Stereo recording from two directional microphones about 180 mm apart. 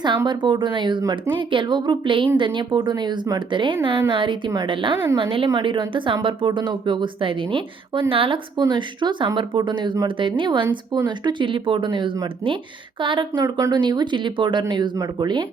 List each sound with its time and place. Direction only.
0.3 s speech: 25° right (ahead or behind)